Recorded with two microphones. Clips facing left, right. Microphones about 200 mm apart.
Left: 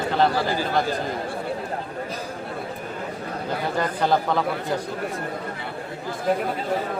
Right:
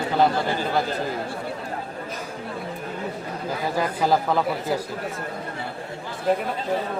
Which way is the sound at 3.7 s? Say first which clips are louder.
Right 1 dB; 5° right (ahead or behind).